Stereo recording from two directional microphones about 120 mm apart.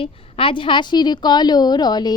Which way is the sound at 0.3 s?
45° left (ahead or behind).